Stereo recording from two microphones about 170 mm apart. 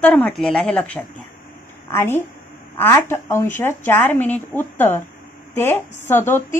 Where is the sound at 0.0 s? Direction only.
10° left (ahead or behind).